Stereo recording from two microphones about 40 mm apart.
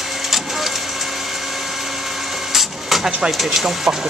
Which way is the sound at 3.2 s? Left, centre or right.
Centre.